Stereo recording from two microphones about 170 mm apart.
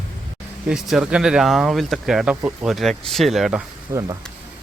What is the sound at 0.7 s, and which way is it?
Speech, 5° right (ahead or behind).